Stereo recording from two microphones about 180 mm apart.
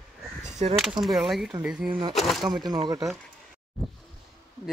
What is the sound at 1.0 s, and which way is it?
Speech, centre (ahead or behind).